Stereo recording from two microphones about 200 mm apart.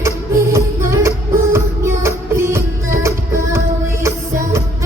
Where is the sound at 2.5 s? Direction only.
15° right (ahead or behind).